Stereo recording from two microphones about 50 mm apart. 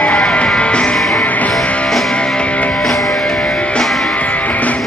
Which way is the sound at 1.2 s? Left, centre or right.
Left.